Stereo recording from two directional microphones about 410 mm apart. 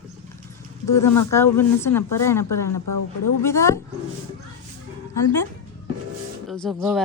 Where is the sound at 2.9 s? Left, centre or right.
Left.